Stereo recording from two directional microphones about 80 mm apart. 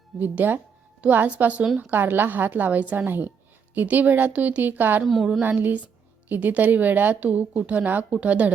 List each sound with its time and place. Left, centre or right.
0.2 s a woman's voice: right
5.0 s a woman's voice: centre
5.4 s a woman's voice: right